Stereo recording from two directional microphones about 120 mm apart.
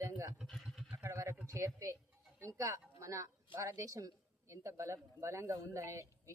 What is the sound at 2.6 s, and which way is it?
A woman's voice, 25° right (ahead or behind).